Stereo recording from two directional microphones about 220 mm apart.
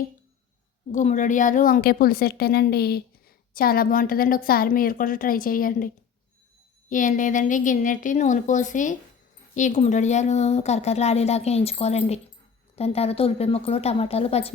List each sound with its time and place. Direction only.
0.9 s a woman's voice: 35° left (ahead or behind)
6.9 s a woman's voice: 35° left (ahead or behind)